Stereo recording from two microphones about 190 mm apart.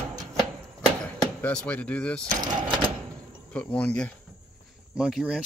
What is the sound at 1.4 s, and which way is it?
Speech, 5° left (ahead or behind).